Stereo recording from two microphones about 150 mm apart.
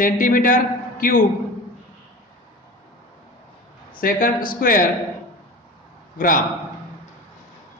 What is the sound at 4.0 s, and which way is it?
Speech, 65° left (ahead or behind).